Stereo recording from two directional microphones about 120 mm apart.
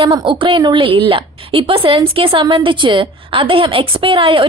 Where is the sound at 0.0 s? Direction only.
45° right (ahead or behind).